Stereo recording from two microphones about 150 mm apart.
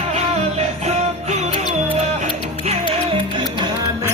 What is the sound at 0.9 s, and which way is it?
Music, 50° right (ahead or behind).